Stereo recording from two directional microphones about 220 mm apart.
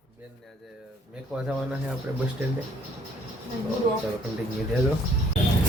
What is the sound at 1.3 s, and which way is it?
Speech, 5° right (ahead or behind).